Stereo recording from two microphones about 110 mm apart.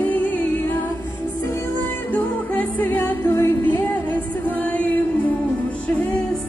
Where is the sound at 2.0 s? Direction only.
15° left (ahead or behind).